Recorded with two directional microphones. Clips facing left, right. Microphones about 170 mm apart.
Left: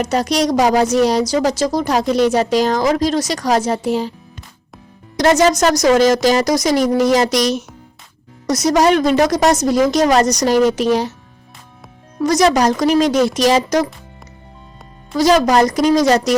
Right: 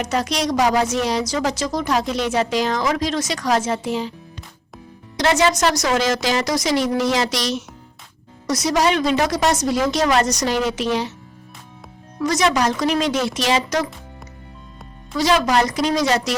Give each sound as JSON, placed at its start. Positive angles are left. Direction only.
{"t": 0.0, "sound": "a woman's voice", "side_deg": 40}
{"t": 5.1, "sound": "a woman's voice", "side_deg": 40}
{"t": 12.2, "sound": "a woman's voice", "side_deg": 40}
{"t": 15.2, "sound": "a woman's voice", "side_deg": 40}